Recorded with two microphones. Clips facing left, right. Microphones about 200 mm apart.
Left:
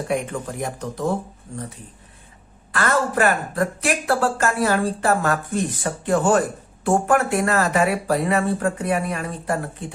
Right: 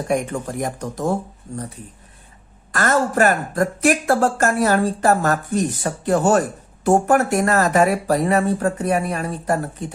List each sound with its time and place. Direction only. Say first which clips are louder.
0.1 s speech: right 4 dB; 45° right (ahead or behind)
2.7 s speech: right 3 dB; 45° right (ahead or behind)